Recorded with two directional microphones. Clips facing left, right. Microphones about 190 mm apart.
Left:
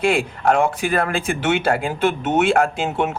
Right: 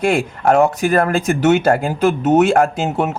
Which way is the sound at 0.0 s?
45° right (ahead or behind).